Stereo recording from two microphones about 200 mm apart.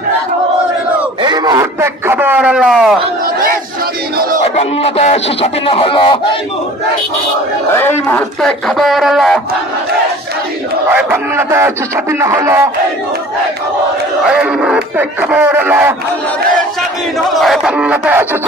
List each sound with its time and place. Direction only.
1.2 s a sound: 20° right (ahead or behind); by 3.0 s centre (ahead or behind)
4.6 s speech: 30° left (ahead or behind)
7.7 s speech: 10° left (ahead or behind)
10.9 s speech: 10° right (ahead or behind)
14.2 s speech: 5° right (ahead or behind)
17.4 s speech: centre (ahead or behind)